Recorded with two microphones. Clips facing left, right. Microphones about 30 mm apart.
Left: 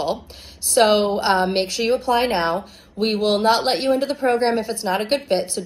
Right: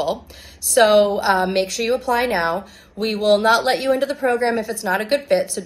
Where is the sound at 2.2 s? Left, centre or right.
Left.